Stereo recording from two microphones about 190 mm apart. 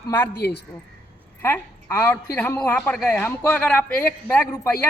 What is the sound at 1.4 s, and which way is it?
A woman's voice, 10° left (ahead or behind).